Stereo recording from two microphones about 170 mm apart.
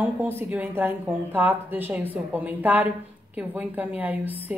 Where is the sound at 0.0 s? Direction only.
10° right (ahead or behind).